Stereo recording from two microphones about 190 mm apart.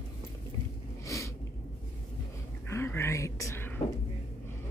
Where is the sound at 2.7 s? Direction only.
10° left (ahead or behind).